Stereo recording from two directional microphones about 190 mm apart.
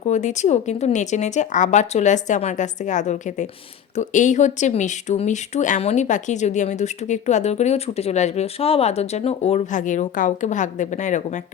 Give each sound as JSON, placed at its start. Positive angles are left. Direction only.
{"t": 0.1, "sound": "speech", "side_deg": 40}